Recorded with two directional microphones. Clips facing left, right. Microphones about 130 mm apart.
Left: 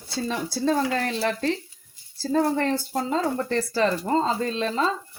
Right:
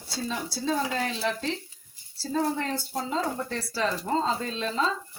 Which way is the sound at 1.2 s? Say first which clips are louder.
Left 5 dB; 60° left (ahead or behind).